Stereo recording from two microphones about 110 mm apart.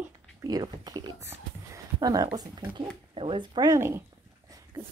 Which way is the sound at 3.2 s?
50° right (ahead or behind).